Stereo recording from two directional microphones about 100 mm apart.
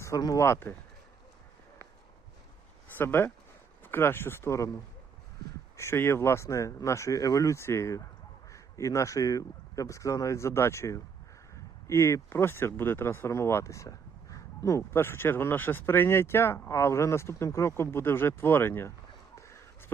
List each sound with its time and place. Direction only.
0.2 s speech: 40° left (ahead or behind)
0.4 s speech: 25° left (ahead or behind)
3.0 s speech: 20° left (ahead or behind)
19.4 s a sound: 30° left (ahead or behind)